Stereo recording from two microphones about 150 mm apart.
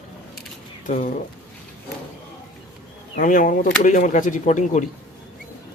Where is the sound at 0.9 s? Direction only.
60° left (ahead or behind).